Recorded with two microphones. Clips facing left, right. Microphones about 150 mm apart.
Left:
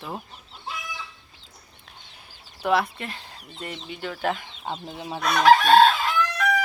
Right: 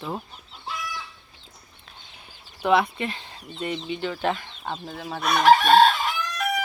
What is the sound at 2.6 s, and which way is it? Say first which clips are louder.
Speech: right 2 dB; centre (ahead or behind).